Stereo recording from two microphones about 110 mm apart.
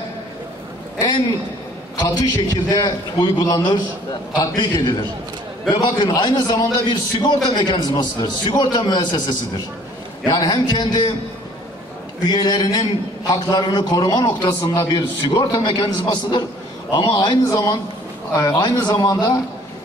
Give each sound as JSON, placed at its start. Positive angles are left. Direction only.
{"t": 0.9, "sound": "a sound", "side_deg": 35}
{"t": 2.0, "sound": "a man's voice", "side_deg": 35}
{"t": 12.3, "sound": "a man's voice", "side_deg": 40}
{"t": 17.5, "sound": "a man's voice", "side_deg": 30}